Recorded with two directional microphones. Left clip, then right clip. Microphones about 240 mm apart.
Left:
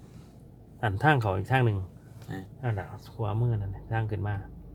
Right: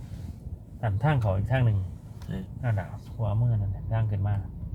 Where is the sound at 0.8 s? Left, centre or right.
Left.